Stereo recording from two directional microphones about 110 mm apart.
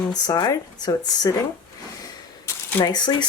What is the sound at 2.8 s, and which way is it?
Speech, 40° left (ahead or behind).